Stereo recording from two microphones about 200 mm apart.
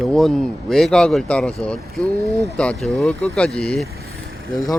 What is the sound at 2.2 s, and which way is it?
Speech, 15° right (ahead or behind).